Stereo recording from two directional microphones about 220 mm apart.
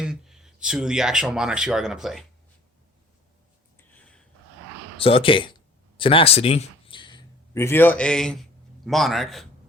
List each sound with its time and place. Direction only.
0.0 s speech: 5° right (ahead or behind)
3.8 s a sound: 5° left (ahead or behind)
4.9 s a man's voice: 25° left (ahead or behind); by 9.5 s centre (ahead or behind)